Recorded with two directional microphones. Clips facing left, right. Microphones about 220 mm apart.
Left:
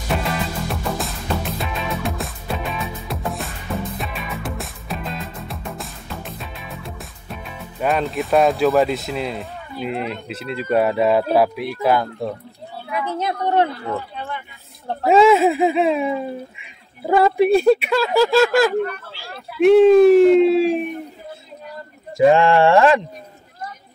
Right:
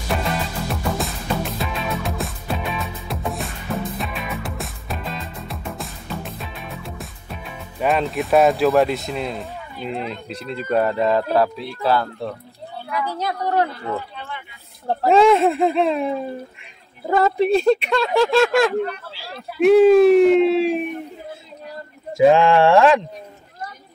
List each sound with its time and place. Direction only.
0.7 s music: centre (ahead or behind)
7.8 s speech: centre (ahead or behind); by 13.7 s 25° left (ahead or behind)
15.0 s speech: centre (ahead or behind)
18.9 s a sound: 50° left (ahead or behind)
19.6 s speech: centre (ahead or behind)
22.1 s speech: centre (ahead or behind)